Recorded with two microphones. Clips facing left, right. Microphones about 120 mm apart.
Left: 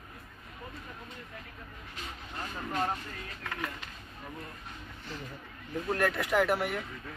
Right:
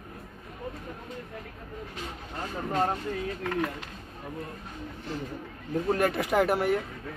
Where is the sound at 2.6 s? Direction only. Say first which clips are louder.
Right 5 dB; 40° right (ahead or behind).